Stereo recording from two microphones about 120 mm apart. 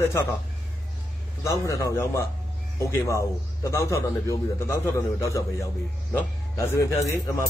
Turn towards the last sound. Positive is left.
turn(degrees=25)  # may be behind; listen again after turning